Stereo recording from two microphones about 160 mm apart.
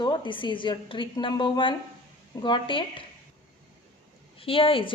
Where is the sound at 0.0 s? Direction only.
30° left (ahead or behind).